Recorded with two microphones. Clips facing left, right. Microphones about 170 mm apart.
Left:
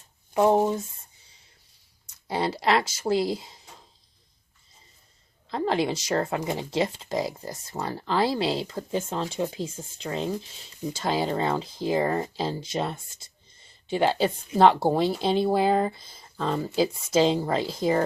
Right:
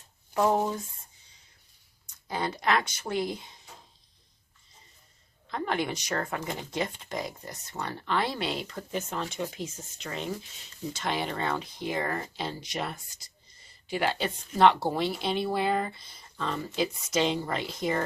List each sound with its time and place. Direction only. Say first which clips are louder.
0.3 s speech: left 5 dB; 25° left (ahead or behind)
2.2 s speech: left 4 dB; 30° left (ahead or behind)
3.1 s speech: left 7 dB; 90° left
5.5 s a woman's voice: left 5 dB; 30° left (ahead or behind)